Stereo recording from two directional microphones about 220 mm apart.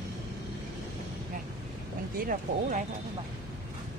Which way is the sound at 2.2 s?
40° right (ahead or behind).